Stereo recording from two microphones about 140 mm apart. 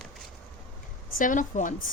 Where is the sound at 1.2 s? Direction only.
65° left (ahead or behind).